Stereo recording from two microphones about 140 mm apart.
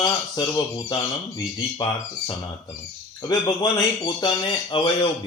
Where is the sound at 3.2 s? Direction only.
30° left (ahead or behind).